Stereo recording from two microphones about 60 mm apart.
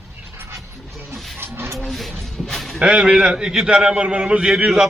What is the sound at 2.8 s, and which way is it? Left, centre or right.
A man's voice, centre.